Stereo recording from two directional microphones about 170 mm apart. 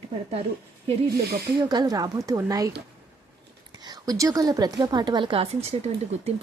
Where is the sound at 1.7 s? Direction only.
20° right (ahead or behind).